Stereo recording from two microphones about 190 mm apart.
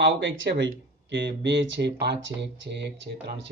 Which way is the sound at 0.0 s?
70° right (ahead or behind).